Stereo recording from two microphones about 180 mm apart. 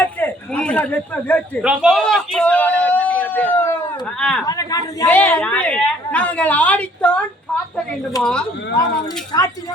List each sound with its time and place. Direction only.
0.0 s a sound: 10° left (ahead or behind)
1.6 s a sound: 5° right (ahead or behind)
4.4 s a man's voice: 20° left (ahead or behind)
5.0 s a woman's voice: 10° left (ahead or behind)
8.2 s speech: 5° left (ahead or behind)
9.3 s a man's voice: 20° left (ahead or behind)